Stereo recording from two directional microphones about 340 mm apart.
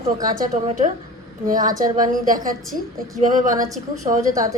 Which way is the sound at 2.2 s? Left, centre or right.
Right.